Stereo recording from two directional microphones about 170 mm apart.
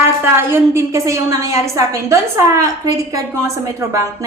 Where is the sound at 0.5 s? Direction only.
15° right (ahead or behind).